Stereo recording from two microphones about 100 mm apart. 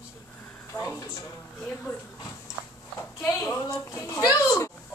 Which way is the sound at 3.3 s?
25° left (ahead or behind).